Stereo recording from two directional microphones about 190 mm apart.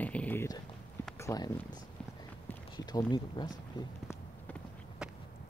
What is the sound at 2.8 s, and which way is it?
Speech, 20° left (ahead or behind).